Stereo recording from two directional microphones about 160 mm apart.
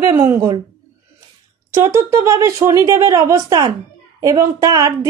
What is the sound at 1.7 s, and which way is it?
A woman's voice, 15° right (ahead or behind).